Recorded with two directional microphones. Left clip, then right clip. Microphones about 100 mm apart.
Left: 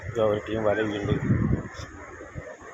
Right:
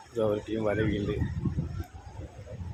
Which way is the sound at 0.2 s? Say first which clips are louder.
Left 4 dB; 30° right (ahead or behind).